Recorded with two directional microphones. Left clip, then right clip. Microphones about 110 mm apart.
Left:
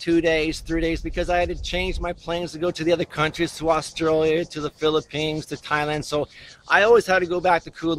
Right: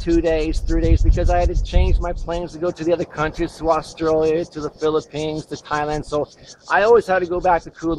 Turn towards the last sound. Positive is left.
turn(degrees=20)  # may be behind; listen again after turning